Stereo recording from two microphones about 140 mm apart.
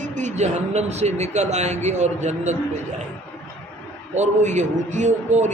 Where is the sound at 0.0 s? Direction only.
60° right (ahead or behind).